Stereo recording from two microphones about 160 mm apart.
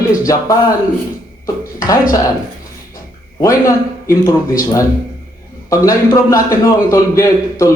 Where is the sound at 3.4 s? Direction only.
20° left (ahead or behind).